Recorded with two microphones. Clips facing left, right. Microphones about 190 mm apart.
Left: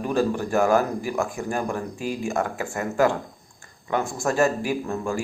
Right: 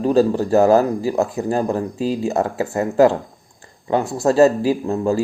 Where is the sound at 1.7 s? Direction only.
20° right (ahead or behind).